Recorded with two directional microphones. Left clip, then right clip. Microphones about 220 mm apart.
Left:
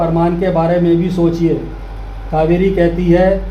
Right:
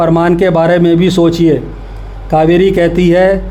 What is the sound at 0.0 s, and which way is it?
A man's voice, 50° right (ahead or behind).